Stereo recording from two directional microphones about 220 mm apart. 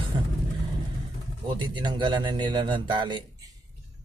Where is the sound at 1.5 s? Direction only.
20° right (ahead or behind).